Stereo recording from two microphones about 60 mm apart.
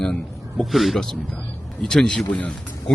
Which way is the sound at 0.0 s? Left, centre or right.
Centre.